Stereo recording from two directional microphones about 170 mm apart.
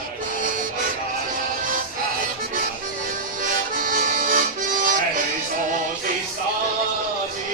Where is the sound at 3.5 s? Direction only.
55° right (ahead or behind).